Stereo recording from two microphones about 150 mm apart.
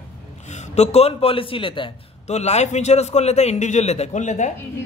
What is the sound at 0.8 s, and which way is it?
A man's voice, 45° left (ahead or behind).